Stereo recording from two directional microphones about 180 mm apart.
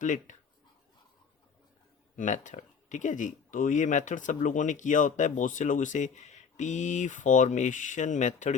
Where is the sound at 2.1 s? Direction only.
45° left (ahead or behind).